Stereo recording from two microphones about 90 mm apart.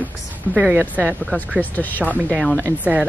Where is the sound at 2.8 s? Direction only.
15° right (ahead or behind).